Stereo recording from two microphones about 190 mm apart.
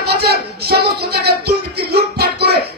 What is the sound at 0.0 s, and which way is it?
Music, 55° right (ahead or behind).